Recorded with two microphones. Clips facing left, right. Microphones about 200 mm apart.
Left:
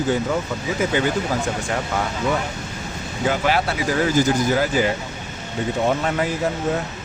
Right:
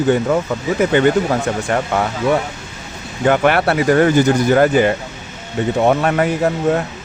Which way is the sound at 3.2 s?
60° right (ahead or behind).